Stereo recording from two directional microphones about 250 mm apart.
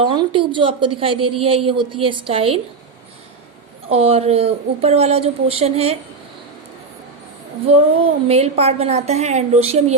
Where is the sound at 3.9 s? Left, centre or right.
Right.